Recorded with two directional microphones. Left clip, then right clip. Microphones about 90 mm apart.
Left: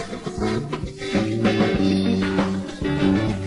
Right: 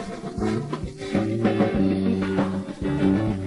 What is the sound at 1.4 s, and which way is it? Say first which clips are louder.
Music: left 2 dB; 30° right (ahead or behind).